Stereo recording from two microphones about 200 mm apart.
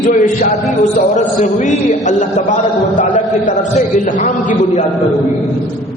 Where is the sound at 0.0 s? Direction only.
40° left (ahead or behind).